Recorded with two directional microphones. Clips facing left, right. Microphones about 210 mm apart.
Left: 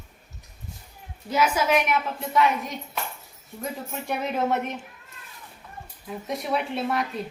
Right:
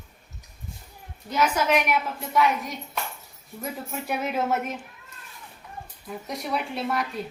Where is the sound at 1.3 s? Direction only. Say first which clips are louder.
Left 1 dB; 5° left (ahead or behind).